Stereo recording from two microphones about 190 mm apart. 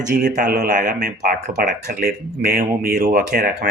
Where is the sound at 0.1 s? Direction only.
45° right (ahead or behind).